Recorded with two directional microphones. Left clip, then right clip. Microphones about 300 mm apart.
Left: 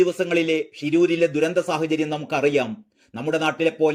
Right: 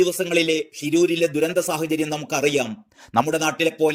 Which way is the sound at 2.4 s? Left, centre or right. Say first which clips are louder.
Left 1 dB; right.